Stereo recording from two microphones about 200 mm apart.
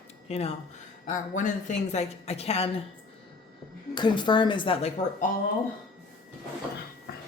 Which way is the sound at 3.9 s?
20° left (ahead or behind).